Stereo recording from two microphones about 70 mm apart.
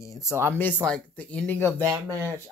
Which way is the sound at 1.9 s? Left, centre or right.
Right.